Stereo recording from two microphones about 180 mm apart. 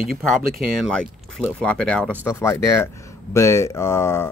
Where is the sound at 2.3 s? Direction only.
15° left (ahead or behind).